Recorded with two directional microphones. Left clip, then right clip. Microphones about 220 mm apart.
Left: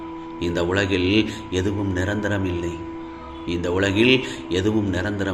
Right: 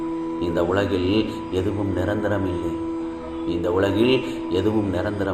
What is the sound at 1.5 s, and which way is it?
Speech, 65° left (ahead or behind).